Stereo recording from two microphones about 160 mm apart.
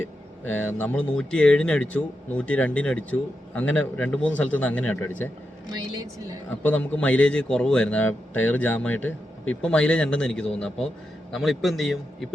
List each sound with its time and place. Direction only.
0.5 s speech: 10° left (ahead or behind)
6.5 s a man's voice: 10° left (ahead or behind)